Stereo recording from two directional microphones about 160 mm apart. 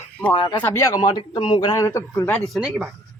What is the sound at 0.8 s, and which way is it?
A man's voice, 25° left (ahead or behind).